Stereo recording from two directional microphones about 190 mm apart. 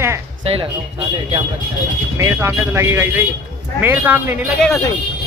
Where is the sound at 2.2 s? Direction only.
15° right (ahead or behind).